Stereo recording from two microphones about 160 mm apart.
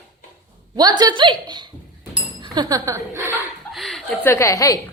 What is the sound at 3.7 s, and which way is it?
Chuckle, centre (ahead or behind).